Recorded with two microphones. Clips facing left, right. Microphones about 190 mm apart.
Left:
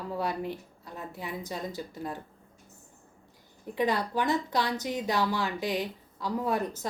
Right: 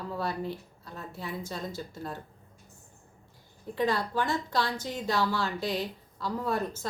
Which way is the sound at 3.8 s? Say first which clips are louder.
Even; 20° left (ahead or behind).